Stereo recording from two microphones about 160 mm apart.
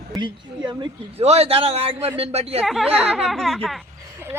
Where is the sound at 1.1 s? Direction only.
40° right (ahead or behind).